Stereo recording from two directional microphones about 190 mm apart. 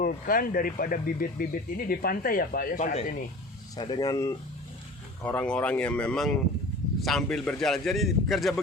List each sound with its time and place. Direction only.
0.0 s speech: 45° left (ahead or behind)
3.8 s speech: 25° left (ahead or behind); by 8.6 s centre (ahead or behind)